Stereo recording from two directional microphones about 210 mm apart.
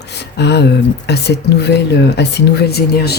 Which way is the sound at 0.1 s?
55° left (ahead or behind).